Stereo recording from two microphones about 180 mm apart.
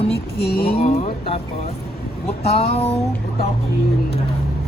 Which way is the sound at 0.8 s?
35° left (ahead or behind).